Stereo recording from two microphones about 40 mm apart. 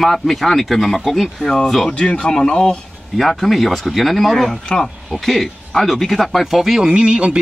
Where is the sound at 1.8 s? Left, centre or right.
Left.